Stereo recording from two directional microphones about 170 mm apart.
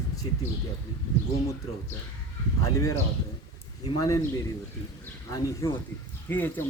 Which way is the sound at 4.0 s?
15° left (ahead or behind).